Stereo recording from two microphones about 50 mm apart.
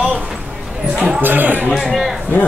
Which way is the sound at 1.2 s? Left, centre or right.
Right.